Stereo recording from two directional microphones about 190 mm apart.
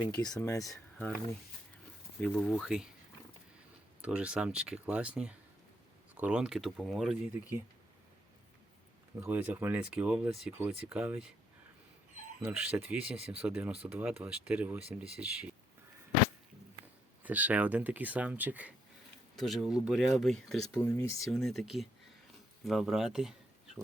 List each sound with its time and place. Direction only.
0.2 s speech: 20° left (ahead or behind)
2.2 s speech: 5° left (ahead or behind)
4.0 s speech: 5° right (ahead or behind)
9.2 s speech: 10° right (ahead or behind)
12.4 s speech: 10° right (ahead or behind)
17.2 s speech: 10° right (ahead or behind)